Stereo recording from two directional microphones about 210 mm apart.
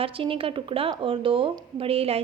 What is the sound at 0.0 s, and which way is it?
A woman's voice, 25° right (ahead or behind).